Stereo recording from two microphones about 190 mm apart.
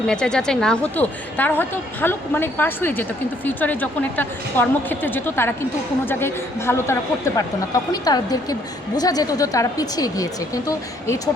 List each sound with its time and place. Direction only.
0.1 s a woman's voice: 5° left (ahead or behind)